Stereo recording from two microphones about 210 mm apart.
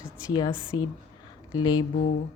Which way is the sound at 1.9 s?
40° left (ahead or behind).